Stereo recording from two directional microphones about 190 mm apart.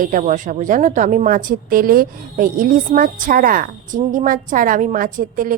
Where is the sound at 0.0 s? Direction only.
40° right (ahead or behind).